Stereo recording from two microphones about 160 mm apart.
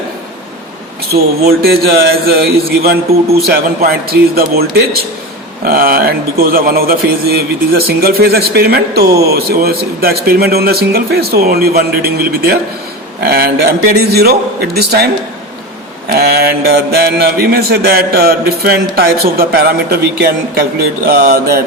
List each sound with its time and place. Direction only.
1.6 s a man's voice: 70° right (ahead or behind)